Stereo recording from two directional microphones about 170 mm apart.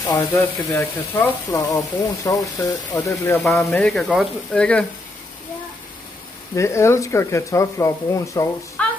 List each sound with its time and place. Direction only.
0.0 s speech: 20° left (ahead or behind)
3.4 s speech: 5° left (ahead or behind)
6.5 s speech: 15° left (ahead or behind)
8.8 s a sound: 5° left (ahead or behind)